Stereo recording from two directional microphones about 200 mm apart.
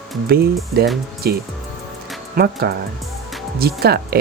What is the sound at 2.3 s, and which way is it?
Speech, 50° right (ahead or behind).